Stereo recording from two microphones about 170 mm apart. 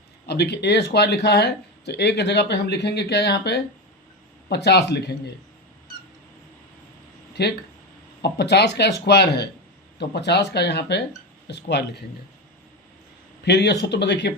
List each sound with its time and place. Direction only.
0.3 s speech: 80° left
7.4 s speech: 70° left (ahead or behind)
13.4 s speech: 85° left